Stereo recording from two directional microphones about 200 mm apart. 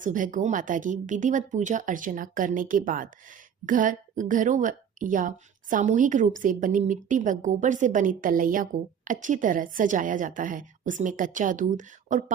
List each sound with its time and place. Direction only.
0.0 s speech: 40° right (ahead or behind)